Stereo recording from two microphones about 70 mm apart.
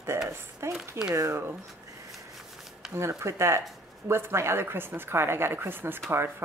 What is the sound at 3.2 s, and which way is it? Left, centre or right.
Speech, right.